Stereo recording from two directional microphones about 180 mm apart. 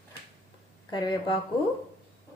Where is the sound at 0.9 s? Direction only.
25° left (ahead or behind).